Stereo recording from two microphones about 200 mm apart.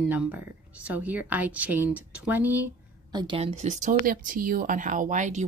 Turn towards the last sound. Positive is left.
turn(degrees=-40)  # may be behind; listen again after turning